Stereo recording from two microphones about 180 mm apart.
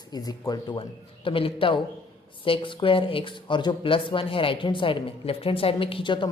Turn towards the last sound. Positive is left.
turn(degrees=25)  # may be behind; listen again after turning